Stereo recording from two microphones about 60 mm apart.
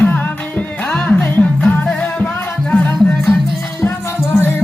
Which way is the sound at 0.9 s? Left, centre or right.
Left.